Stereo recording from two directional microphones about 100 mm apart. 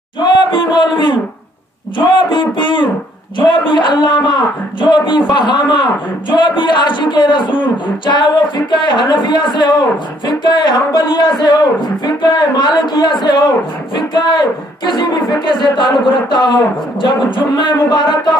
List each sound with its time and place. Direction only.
0.2 s speech: 50° left (ahead or behind)